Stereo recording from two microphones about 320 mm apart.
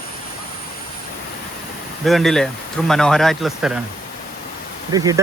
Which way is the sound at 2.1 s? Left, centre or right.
Centre.